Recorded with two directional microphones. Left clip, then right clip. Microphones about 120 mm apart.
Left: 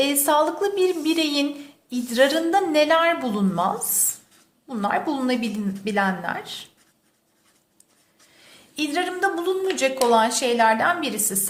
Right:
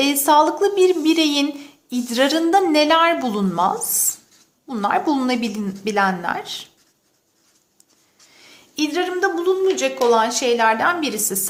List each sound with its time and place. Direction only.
0.0 s a woman's voice: 25° right (ahead or behind)
8.3 s a sound: 25° right (ahead or behind)
10.1 s a woman's voice: 20° right (ahead or behind)